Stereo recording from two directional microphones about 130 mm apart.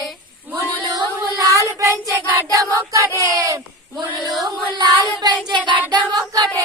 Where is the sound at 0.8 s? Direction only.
30° right (ahead or behind).